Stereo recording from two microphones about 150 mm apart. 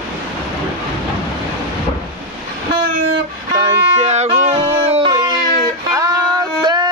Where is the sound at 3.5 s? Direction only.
30° right (ahead or behind).